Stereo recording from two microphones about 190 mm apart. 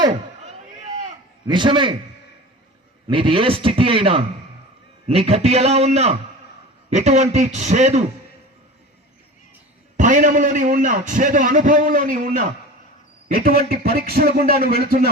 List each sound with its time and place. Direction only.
1.5 s a man's voice: 25° right (ahead or behind)
3.1 s a man's voice: 25° right (ahead or behind)
10.0 s a man's voice: 40° right (ahead or behind)